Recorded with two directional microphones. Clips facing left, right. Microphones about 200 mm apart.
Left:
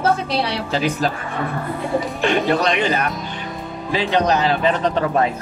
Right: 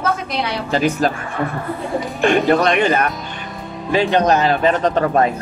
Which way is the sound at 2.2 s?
50° right (ahead or behind).